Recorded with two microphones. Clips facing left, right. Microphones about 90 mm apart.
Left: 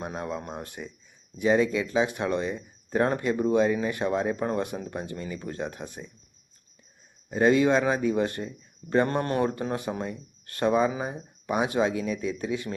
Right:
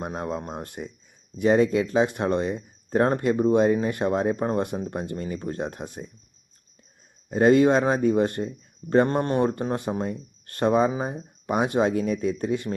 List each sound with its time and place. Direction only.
0.0 s speech: 40° right (ahead or behind)
7.3 s speech: 40° right (ahead or behind)
9.1 s speech: 25° right (ahead or behind)
9.4 s speech: 35° right (ahead or behind)